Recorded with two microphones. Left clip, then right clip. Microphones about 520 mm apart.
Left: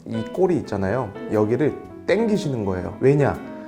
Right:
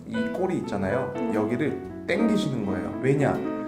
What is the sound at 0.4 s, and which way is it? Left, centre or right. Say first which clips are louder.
Speech: left 6 dB; left.